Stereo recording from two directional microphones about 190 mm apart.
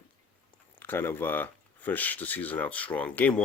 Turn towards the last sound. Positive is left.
turn(degrees=5)  # may be behind; listen again after turning